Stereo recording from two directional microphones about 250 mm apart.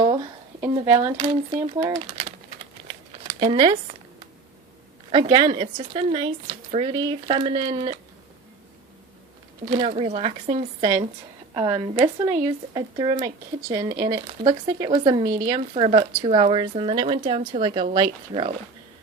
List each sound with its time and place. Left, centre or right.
0.6 s speech: centre
3.4 s speech: centre
5.1 s speech: centre
9.7 s speech: right